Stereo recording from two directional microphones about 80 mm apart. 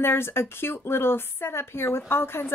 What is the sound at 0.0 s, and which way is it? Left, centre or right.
Speech, left.